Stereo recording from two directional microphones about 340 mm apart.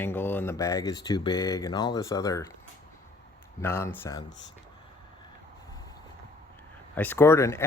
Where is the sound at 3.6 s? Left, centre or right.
Centre.